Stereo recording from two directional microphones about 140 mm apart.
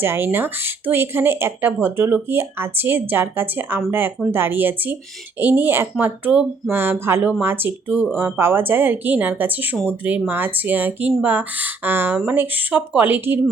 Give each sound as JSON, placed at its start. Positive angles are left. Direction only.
{"t": 0.0, "sound": "speech", "side_deg": -15}